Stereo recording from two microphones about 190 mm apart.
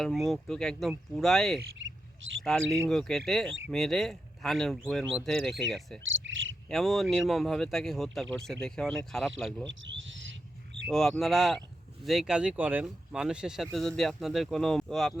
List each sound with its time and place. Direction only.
0.0 s speech: centre (ahead or behind)
1.8 s a sound: 90° right
2.4 s speech: centre (ahead or behind)
6.1 s speech: 90° right
6.7 s speech: centre (ahead or behind)
9.6 s a sound: 80° right
10.8 s speech: centre (ahead or behind)